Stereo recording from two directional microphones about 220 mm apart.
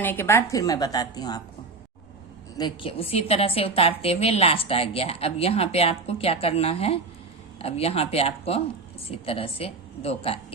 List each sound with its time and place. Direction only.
0.0 s a woman's voice: 10° left (ahead or behind)
2.6 s a woman's voice: 20° left (ahead or behind)